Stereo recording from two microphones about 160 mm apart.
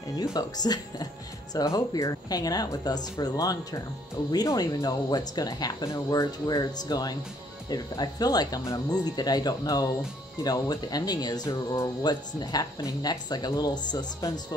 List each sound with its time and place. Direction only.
0.1 s speech: 20° left (ahead or behind)